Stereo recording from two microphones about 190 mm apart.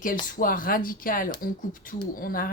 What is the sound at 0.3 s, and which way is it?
Speech, 45° left (ahead or behind).